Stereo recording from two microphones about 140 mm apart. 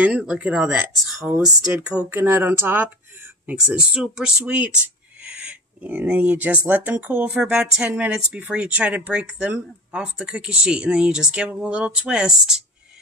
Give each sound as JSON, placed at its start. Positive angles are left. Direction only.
{"t": 0.0, "sound": "speech", "side_deg": -10}
{"t": 3.4, "sound": "speech", "side_deg": -5}